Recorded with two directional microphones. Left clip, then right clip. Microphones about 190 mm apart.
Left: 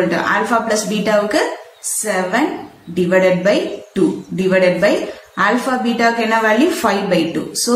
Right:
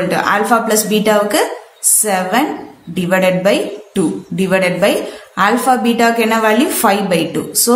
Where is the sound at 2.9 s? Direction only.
45° right (ahead or behind).